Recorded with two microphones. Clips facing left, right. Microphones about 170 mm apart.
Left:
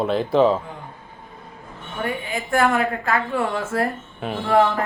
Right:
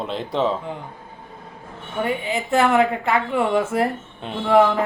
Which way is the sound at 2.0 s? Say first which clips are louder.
Right 3 dB; 25° right (ahead or behind).